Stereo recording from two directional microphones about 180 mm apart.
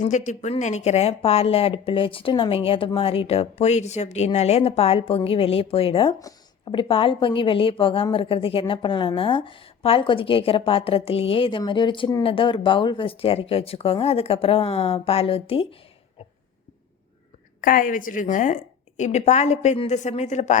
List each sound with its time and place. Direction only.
0.0 s speech: 45° left (ahead or behind)
17.6 s speech: 50° left (ahead or behind)